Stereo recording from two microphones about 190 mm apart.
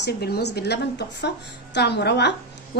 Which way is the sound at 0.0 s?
55° left (ahead or behind).